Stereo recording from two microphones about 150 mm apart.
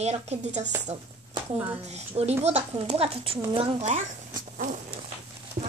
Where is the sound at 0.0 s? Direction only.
45° right (ahead or behind).